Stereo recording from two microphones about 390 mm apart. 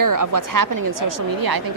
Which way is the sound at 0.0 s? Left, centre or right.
Right.